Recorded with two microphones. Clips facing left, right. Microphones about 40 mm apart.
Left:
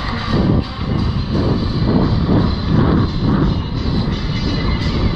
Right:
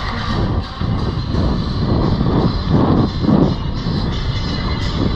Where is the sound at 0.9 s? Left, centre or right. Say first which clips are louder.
Left 3 dB; left.